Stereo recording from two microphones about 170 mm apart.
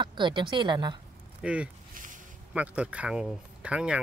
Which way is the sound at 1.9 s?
50° right (ahead or behind).